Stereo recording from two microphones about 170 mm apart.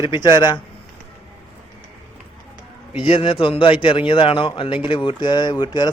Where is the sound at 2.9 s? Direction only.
30° left (ahead or behind).